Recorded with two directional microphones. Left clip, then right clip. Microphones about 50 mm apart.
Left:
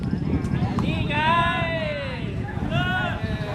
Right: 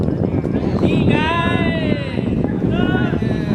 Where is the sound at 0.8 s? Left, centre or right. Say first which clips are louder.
Right 4 dB; right.